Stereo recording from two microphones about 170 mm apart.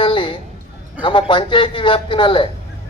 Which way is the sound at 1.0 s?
30° left (ahead or behind).